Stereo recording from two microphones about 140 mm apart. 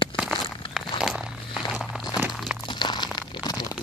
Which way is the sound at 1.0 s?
5° right (ahead or behind).